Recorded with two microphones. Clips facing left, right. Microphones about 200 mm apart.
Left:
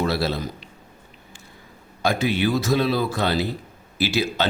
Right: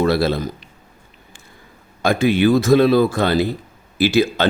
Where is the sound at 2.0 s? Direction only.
50° right (ahead or behind).